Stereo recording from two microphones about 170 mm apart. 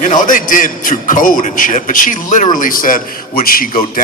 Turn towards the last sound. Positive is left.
turn(degrees=55)  # may be behind; listen again after turning